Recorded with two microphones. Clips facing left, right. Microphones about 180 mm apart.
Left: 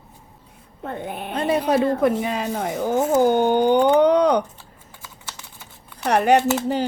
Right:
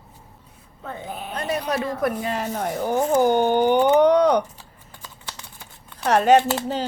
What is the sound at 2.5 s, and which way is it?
Speech, 10° left (ahead or behind).